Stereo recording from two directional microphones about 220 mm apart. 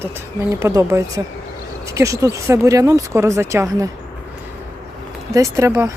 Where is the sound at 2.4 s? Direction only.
15° right (ahead or behind).